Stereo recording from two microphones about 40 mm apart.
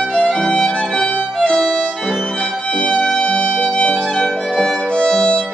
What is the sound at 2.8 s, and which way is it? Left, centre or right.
Music, left.